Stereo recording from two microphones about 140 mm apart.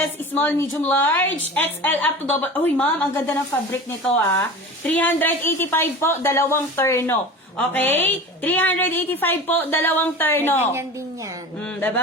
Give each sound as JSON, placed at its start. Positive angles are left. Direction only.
{"t": 0.3, "sound": "a woman's voice", "side_deg": 15}
{"t": 10.6, "sound": "a woman's voice", "side_deg": -15}